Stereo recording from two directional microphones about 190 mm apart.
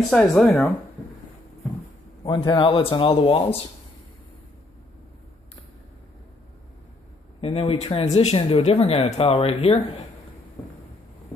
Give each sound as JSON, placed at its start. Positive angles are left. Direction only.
{"t": 0.1, "sound": "speech", "side_deg": 0}
{"t": 2.2, "sound": "a man's voice", "side_deg": 25}
{"t": 7.4, "sound": "speech", "side_deg": 30}